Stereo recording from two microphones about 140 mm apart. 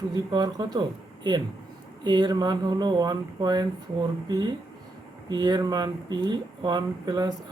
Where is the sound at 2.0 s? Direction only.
30° right (ahead or behind).